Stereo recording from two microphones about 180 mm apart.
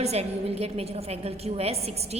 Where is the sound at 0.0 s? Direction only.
35° right (ahead or behind).